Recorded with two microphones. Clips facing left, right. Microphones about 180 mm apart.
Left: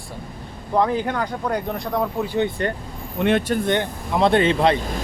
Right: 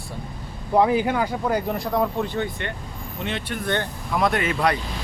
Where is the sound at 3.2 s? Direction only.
55° left (ahead or behind).